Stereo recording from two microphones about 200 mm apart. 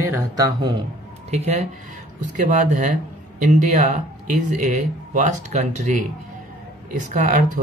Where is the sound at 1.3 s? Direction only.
35° right (ahead or behind).